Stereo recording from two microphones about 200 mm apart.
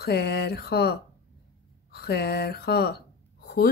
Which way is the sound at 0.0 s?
55° left (ahead or behind).